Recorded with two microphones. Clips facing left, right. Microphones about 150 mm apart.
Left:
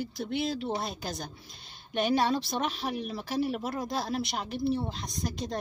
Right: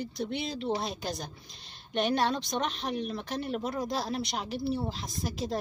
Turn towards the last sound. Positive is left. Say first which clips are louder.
# right 1 dB
turn(degrees=0)  # may be behind; listen again after turning